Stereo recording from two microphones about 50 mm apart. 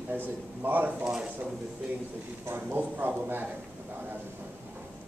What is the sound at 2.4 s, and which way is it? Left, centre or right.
Speech, right.